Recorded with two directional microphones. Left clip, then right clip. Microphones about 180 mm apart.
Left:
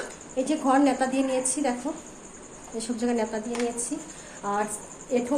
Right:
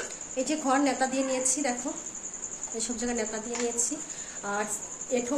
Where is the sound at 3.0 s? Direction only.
Centre (ahead or behind).